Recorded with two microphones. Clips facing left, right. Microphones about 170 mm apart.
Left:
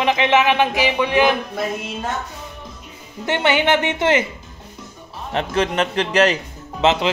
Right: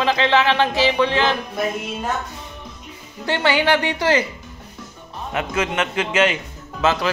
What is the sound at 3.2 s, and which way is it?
A man's voice, 20° left (ahead or behind).